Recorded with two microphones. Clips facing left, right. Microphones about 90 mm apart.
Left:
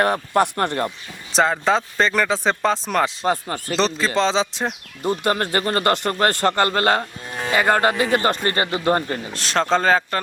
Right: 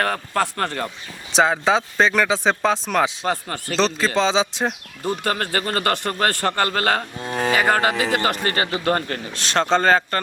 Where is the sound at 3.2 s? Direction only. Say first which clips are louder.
Left 2 dB; 20° left (ahead or behind).